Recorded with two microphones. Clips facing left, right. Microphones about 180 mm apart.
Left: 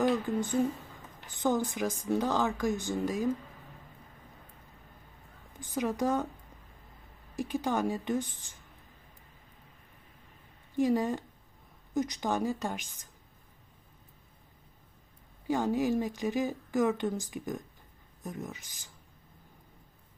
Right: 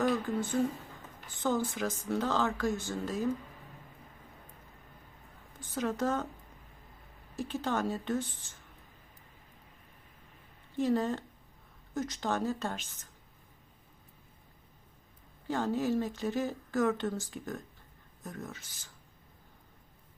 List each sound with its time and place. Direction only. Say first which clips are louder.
0.0 s a sound: left 2 dB; 15° left (ahead or behind)
1.3 s speech: left 2 dB; 15° left (ahead or behind)
5.5 s speech: left 2 dB; 15° left (ahead or behind)
7.3 s speech: left 2 dB; 15° left (ahead or behind)
10.8 s speech: left 2 dB; 15° left (ahead or behind)
15.4 s speech: left 2 dB; 15° left (ahead or behind)